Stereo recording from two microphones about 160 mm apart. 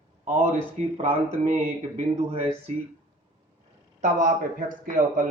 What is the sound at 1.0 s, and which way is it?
Speech, 45° right (ahead or behind).